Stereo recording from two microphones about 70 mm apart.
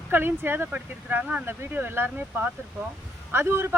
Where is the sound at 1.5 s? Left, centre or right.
Right.